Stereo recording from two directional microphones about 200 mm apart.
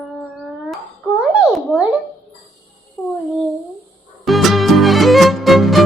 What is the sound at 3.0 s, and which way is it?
Child singing, 5° left (ahead or behind).